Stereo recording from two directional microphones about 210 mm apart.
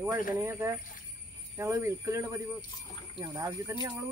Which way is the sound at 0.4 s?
10° right (ahead or behind).